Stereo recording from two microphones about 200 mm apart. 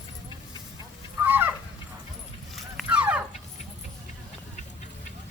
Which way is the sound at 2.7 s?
5° right (ahead or behind).